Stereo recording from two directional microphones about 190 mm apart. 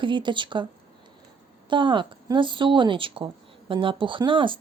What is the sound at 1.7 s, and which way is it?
Speech, 25° right (ahead or behind).